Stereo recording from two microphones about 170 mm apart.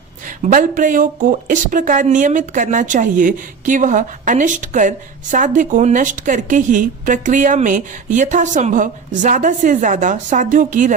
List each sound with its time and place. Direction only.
0.4 s speech: 50° right (ahead or behind)